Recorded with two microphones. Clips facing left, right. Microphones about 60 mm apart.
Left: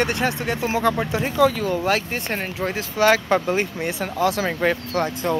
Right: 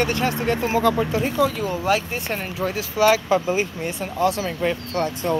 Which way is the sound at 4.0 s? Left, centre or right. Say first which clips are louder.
Even; left.